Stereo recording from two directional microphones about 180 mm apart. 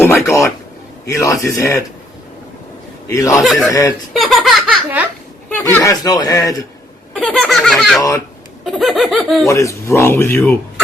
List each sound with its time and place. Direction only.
0.0 s a sound: 15° left (ahead or behind)
1.0 s speech: 20° left (ahead or behind)
3.1 s speech: 15° left (ahead or behind)
3.4 s speech: centre (ahead or behind)
5.7 s speech: 15° left (ahead or behind)
7.2 s speech: 5° left (ahead or behind)
9.5 s speech: 15° left (ahead or behind)